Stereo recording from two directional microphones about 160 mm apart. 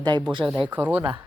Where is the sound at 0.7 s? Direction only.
10° right (ahead or behind).